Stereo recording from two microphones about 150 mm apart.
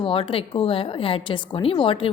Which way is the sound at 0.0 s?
35° left (ahead or behind).